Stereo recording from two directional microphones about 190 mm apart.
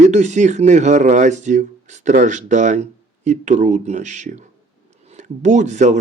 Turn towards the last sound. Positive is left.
turn(degrees=-40)  # may be behind; listen again after turning